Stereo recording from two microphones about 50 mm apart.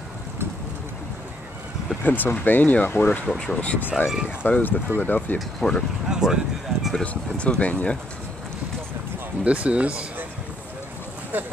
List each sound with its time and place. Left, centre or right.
2.0 s speech: left
3.3 s speech: centre
3.9 s speech: centre
4.5 s speech: left
5.6 s speech: centre
6.0 s speech: centre
7.0 s speech: left
9.4 s speech: right
11.3 s speech: right